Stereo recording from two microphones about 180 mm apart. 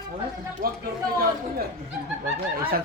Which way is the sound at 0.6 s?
50° right (ahead or behind).